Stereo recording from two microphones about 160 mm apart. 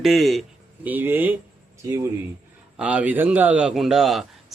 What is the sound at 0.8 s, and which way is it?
Speech, 10° right (ahead or behind).